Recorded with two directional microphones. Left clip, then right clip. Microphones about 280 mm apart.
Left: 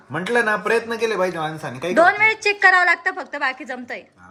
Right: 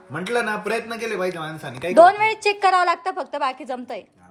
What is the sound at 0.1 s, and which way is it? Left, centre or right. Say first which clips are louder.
Speech: left 4 dB; left.